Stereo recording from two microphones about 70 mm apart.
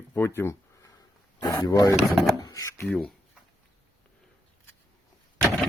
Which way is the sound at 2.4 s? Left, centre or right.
Left.